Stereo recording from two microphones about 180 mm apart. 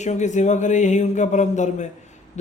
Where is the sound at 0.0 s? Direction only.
40° left (ahead or behind).